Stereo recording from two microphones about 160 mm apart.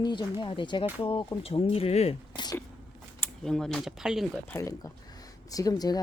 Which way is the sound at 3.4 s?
5° left (ahead or behind).